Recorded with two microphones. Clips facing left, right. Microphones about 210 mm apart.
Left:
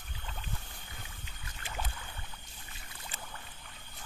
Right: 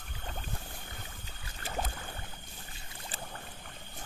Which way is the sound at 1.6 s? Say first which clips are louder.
Right 5 dB; 40° right (ahead or behind).